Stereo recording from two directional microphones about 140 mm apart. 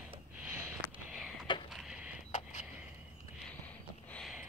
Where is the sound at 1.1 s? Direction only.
5° right (ahead or behind).